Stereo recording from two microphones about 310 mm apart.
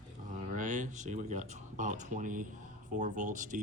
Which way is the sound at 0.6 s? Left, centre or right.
Right.